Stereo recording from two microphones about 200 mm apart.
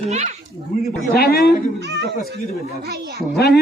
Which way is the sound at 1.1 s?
50° left (ahead or behind).